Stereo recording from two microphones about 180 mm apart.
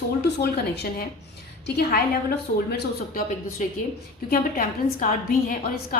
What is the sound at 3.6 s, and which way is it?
A woman's voice, 45° left (ahead or behind).